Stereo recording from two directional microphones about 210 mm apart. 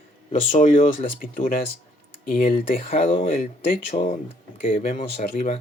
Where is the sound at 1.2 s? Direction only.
40° left (ahead or behind).